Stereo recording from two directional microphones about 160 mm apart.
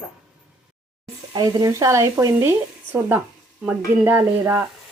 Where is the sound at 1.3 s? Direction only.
25° right (ahead or behind).